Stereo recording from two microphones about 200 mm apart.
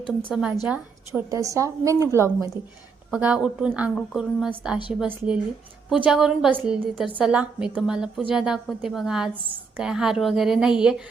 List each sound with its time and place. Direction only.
0.3 s a woman's voice: centre (ahead or behind)